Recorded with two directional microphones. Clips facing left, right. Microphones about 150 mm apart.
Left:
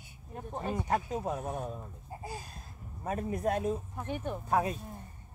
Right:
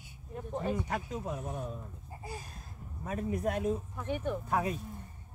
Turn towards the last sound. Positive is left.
turn(degrees=35)  # may be behind; listen again after turning